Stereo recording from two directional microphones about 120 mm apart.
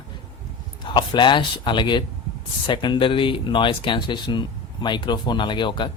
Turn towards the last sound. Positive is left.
turn(degrees=40)  # may be behind; listen again after turning